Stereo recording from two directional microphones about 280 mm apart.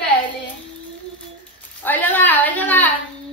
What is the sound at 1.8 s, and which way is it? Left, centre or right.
A woman's voice, centre.